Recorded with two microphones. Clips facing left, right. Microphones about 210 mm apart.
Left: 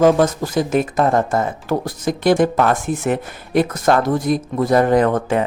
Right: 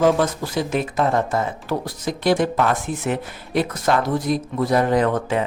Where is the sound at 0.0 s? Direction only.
45° left (ahead or behind).